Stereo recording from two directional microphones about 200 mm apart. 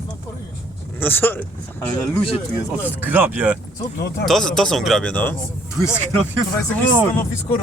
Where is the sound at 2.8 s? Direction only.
10° right (ahead or behind).